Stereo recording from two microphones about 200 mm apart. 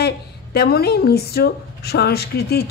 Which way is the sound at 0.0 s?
50° left (ahead or behind).